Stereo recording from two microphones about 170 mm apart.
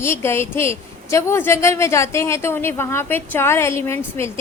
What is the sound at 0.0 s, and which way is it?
A woman's voice, 15° left (ahead or behind).